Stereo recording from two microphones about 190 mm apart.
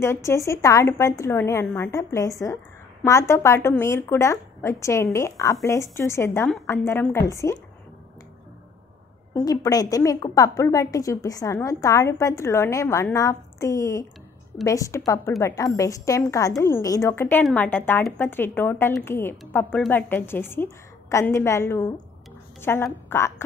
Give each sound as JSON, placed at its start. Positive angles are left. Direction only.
{"t": 0.0, "sound": "a woman's voice", "side_deg": 15}
{"t": 9.3, "sound": "a woman's voice", "side_deg": 20}